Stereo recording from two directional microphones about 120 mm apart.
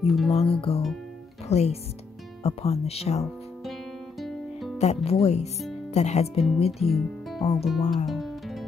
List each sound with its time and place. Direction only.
0.0 s music: centre (ahead or behind)
0.4 s speech: 55° left (ahead or behind)
4.2 s music: centre (ahead or behind)
4.7 s speech: 60° left (ahead or behind)
6.8 s speech: centre (ahead or behind)
7.9 s music: centre (ahead or behind)